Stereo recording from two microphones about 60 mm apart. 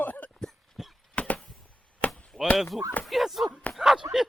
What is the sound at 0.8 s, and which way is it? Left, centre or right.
Clip-clop, centre.